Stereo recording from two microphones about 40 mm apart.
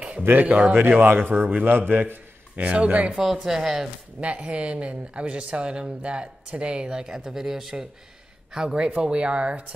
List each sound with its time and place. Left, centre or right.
0.2 s speech: right
0.5 s speech: right
0.9 s speech: right
2.5 s speech: right
3.2 s speech: centre
4.2 s speech: right; by 7.8 s centre
8.5 s speech: right